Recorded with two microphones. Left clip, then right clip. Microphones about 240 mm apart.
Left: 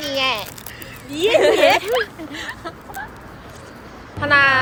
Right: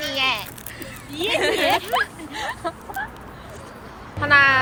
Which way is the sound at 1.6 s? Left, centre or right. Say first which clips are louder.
Left 6 dB; left.